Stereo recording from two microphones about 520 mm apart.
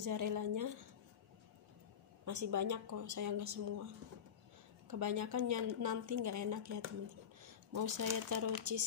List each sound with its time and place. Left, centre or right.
0.0 s a woman's voice: right
2.2 s a woman's voice: right
4.8 s a woman's voice: right